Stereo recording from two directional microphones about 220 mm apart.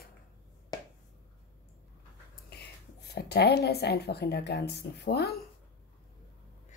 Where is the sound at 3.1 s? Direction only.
50° left (ahead or behind).